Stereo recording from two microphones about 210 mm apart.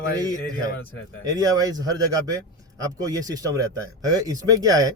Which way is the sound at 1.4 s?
15° right (ahead or behind).